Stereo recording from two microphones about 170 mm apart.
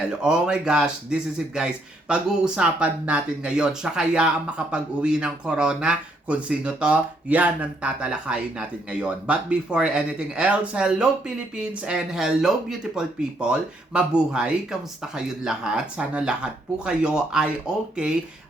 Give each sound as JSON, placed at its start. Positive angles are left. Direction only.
{"t": 0.1, "sound": "speech", "side_deg": -5}